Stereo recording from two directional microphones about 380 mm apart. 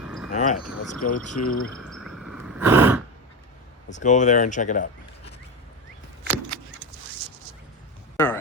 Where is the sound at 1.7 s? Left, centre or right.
Centre.